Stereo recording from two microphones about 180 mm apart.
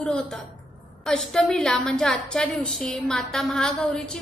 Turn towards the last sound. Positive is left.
turn(degrees=5)  # may be behind; listen again after turning